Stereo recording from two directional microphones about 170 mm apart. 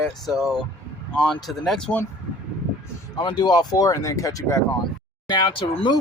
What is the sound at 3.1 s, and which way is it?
Speech, 25° left (ahead or behind).